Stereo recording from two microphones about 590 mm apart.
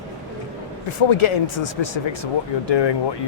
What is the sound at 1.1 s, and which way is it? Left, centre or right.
Speech, left.